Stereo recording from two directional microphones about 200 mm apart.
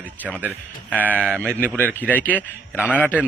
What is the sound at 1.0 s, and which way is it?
Speech, 10° right (ahead or behind).